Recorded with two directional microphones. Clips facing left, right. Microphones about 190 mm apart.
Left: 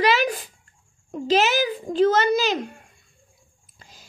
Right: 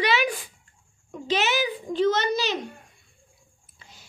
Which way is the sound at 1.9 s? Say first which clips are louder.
Left 5 dB; 55° left (ahead or behind).